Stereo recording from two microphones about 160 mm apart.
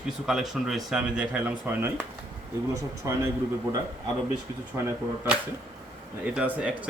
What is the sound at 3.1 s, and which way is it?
Speech, 20° right (ahead or behind).